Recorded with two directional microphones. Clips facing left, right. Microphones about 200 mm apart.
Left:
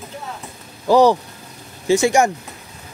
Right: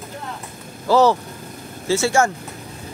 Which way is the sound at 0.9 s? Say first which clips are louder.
Left 2 dB; 15° left (ahead or behind).